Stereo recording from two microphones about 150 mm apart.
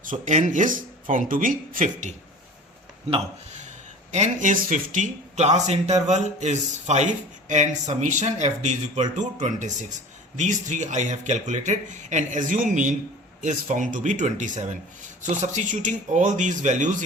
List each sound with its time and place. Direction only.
0.1 s speech: 55° right (ahead or behind)
4.1 s speech: 55° right (ahead or behind)